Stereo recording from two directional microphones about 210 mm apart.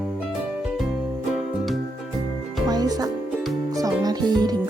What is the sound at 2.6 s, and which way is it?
Music, 20° right (ahead or behind).